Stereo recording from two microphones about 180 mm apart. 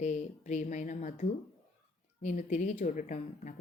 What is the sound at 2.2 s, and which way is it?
Speech, 45° left (ahead or behind).